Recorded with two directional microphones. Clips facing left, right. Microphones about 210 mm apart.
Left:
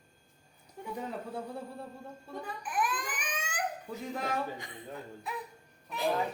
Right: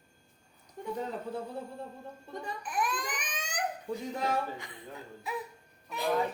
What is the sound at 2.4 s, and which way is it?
Crying, 5° left (ahead or behind).